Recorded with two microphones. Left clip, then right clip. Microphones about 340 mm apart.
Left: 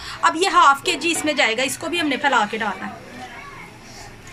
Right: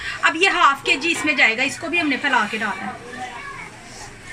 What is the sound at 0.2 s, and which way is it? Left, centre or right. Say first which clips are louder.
A woman's voice: left 1 dB; centre.